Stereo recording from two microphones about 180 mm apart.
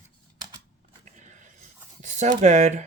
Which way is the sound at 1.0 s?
40° right (ahead or behind).